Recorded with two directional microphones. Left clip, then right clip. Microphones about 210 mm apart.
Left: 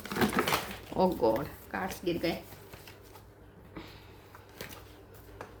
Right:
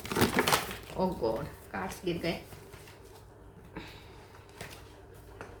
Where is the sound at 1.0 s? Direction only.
50° left (ahead or behind).